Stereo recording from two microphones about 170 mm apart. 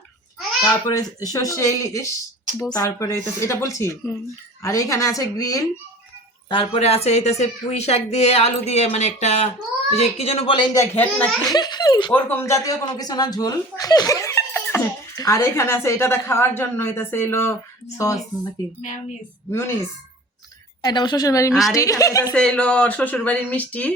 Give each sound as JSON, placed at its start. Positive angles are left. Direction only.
{"t": 0.6, "sound": "speech", "side_deg": 20}
{"t": 6.5, "sound": "speech", "side_deg": 35}
{"t": 10.8, "sound": "speech", "side_deg": 10}
{"t": 11.4, "sound": "speech", "side_deg": 25}
{"t": 12.1, "sound": "speech", "side_deg": 10}
{"t": 19.5, "sound": "speech", "side_deg": 15}
{"t": 21.5, "sound": "a woman's voice", "side_deg": 0}
{"t": 21.8, "sound": "speech", "side_deg": 20}
{"t": 22.4, "sound": "speech", "side_deg": 5}